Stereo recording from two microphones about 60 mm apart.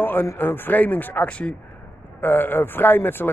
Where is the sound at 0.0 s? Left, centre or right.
Left.